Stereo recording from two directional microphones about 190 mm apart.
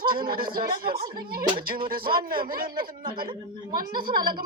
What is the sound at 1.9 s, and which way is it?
Speech, 50° right (ahead or behind).